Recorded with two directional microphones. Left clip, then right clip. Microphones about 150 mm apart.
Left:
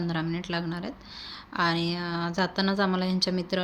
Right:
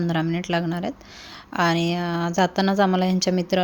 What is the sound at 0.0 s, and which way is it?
Speech, 45° right (ahead or behind).